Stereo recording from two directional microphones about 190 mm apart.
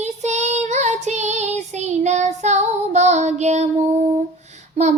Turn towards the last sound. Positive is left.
turn(degrees=-35)  # may be behind; listen again after turning